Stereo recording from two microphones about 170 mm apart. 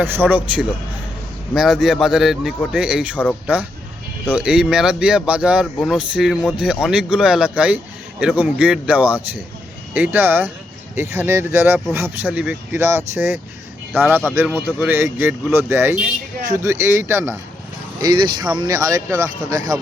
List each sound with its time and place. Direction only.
0.0 s speech: 10° right (ahead or behind)
3.2 s speech: 5° left (ahead or behind)
4.3 s speech: 5° right (ahead or behind)
18.0 s speech: 25° right (ahead or behind)